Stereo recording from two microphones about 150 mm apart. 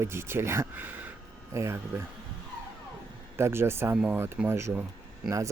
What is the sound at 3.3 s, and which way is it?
Speech, 15° right (ahead or behind).